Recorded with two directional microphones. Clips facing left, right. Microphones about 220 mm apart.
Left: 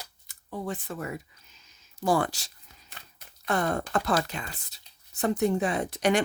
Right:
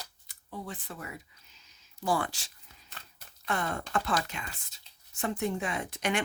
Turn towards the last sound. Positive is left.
turn(degrees=35)  # may be behind; listen again after turning